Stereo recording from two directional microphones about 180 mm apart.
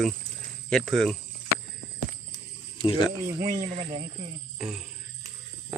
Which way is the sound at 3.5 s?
30° right (ahead or behind).